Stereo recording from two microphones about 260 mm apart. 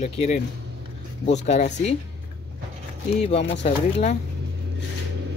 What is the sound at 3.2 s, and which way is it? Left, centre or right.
Speech, left.